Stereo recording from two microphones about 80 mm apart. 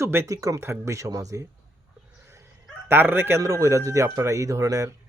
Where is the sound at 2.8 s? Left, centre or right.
Right.